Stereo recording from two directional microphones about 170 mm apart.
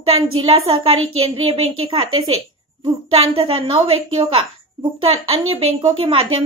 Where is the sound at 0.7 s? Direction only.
35° right (ahead or behind).